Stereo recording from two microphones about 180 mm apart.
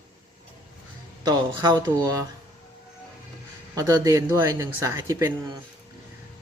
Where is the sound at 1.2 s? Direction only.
20° right (ahead or behind).